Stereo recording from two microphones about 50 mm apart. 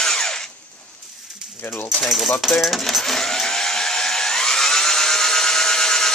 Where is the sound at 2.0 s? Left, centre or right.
Centre.